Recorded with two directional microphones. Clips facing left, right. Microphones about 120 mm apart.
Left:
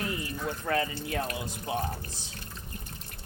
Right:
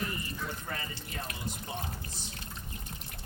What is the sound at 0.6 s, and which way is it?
Speech, 90° left.